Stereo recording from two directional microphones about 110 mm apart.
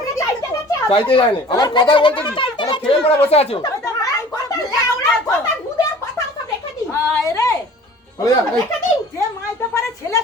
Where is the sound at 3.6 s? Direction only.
35° left (ahead or behind).